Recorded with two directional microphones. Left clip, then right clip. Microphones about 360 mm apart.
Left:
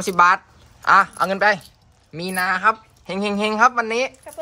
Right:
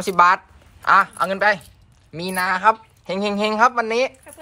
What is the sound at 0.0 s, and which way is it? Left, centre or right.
Speech, centre.